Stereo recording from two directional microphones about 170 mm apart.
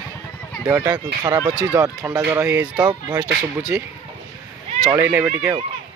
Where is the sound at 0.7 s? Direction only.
20° right (ahead or behind).